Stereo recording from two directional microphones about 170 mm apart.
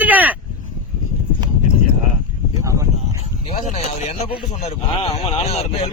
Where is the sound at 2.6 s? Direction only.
20° right (ahead or behind).